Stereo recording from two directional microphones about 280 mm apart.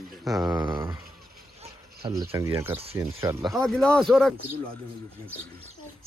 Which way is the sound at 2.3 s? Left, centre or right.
Centre.